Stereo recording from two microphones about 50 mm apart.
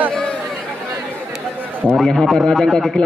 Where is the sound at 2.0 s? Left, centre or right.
Centre.